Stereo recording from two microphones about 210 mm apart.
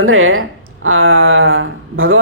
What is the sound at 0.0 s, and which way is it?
Speech, 70° right (ahead or behind).